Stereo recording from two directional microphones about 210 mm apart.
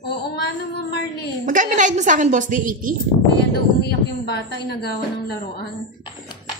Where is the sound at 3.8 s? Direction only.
50° left (ahead or behind).